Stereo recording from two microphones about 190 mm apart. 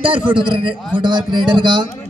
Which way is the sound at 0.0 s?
25° right (ahead or behind).